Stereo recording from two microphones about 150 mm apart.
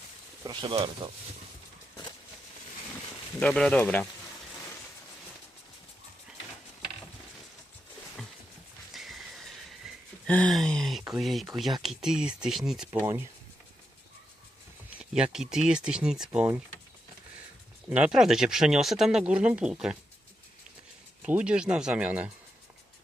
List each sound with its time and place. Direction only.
0.4 s speech: 30° right (ahead or behind)
3.4 s speech: 5° left (ahead or behind)
8.9 s a sound: centre (ahead or behind)
12.9 s speech: 15° right (ahead or behind)
14.9 s speech: 5° right (ahead or behind)
17.8 s speech: 10° right (ahead or behind)
21.2 s speech: 5° right (ahead or behind)